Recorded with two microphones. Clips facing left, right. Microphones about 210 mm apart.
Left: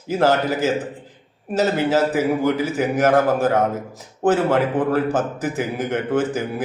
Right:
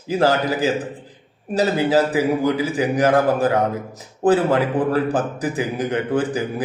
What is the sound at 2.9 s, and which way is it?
Speech, 35° right (ahead or behind).